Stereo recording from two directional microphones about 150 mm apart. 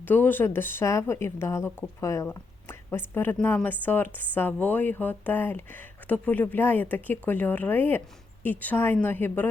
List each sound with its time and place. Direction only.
0.0 s speech: 15° left (ahead or behind)